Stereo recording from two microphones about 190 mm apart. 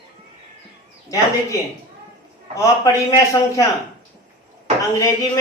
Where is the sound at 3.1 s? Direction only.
15° left (ahead or behind).